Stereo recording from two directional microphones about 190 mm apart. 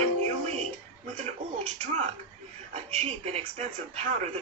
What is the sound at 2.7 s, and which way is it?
A man's voice, 35° right (ahead or behind).